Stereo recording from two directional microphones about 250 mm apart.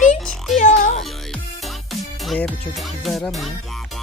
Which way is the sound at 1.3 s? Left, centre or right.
Centre.